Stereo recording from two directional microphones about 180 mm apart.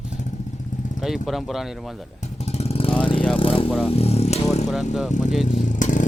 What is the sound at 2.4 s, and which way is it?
Vehicle, 35° left (ahead or behind).